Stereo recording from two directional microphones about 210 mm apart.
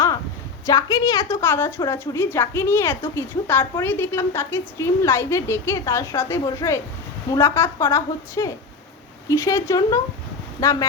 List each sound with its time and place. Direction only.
0.6 s a woman's voice: 15° left (ahead or behind)